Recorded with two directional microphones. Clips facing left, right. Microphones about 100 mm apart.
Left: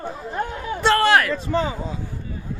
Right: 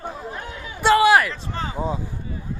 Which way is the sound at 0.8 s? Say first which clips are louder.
Right 2 dB; 5° right (ahead or behind).